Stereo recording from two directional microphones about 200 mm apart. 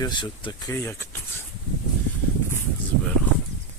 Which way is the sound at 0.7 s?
10° left (ahead or behind).